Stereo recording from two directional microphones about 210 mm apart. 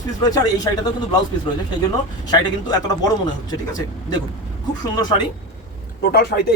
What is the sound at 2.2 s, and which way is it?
A man's voice, 20° left (ahead or behind).